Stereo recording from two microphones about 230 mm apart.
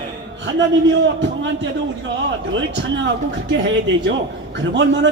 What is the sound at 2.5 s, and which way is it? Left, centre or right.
A man's voice, right.